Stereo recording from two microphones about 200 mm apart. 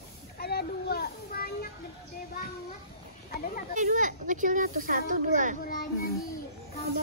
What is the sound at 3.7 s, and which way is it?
Speech, 40° right (ahead or behind).